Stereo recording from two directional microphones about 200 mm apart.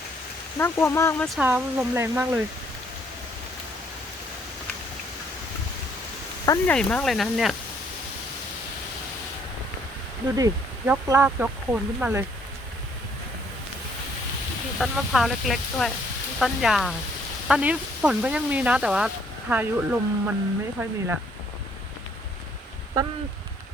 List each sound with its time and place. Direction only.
0.6 s speech: 15° left (ahead or behind)
1.2 s speech: 5° right (ahead or behind)
6.4 s speech: 15° left (ahead or behind)
6.7 s speech: 5° left (ahead or behind)
10.3 s speech: 15° right (ahead or behind)
14.8 s speech: centre (ahead or behind)